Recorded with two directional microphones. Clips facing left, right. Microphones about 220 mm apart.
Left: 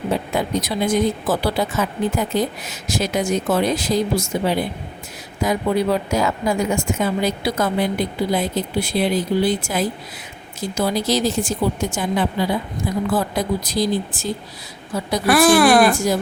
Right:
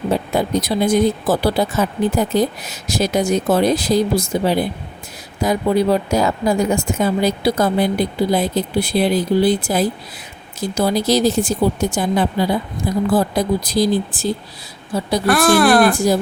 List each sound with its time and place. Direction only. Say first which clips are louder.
0.3 s a woman's voice: right 5 dB; 35° right (ahead or behind)
15.3 s speech: even; centre (ahead or behind)